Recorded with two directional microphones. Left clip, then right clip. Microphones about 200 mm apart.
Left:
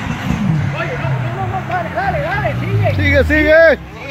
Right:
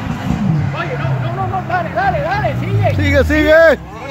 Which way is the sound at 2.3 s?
10° right (ahead or behind).